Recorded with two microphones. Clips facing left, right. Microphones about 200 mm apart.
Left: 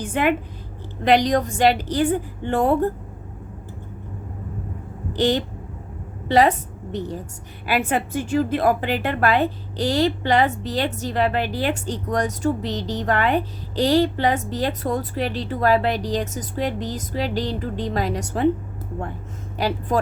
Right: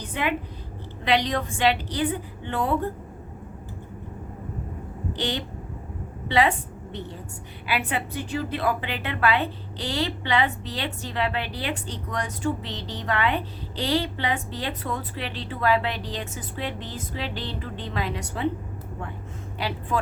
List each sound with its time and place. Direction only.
0.0 s a woman's voice: 50° left (ahead or behind)
5.1 s a woman's voice: 45° left (ahead or behind)
7.7 s a woman's voice: 45° left (ahead or behind)
19.5 s a woman's voice: 45° left (ahead or behind)